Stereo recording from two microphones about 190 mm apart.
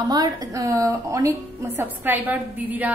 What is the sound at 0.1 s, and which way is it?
A woman's voice, 20° right (ahead or behind).